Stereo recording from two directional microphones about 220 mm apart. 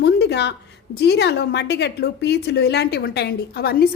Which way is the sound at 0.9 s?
50° left (ahead or behind).